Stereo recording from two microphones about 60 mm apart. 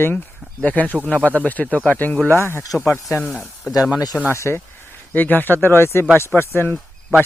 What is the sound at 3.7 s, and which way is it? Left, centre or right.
Speech, left.